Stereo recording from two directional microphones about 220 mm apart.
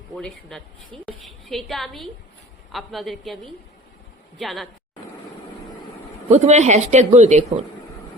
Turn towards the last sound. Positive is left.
turn(degrees=-30)  # may be behind; listen again after turning